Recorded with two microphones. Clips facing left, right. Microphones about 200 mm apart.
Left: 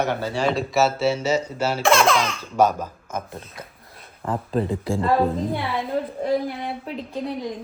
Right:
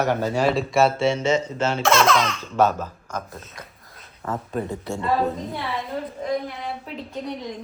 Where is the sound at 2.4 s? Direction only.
10° left (ahead or behind).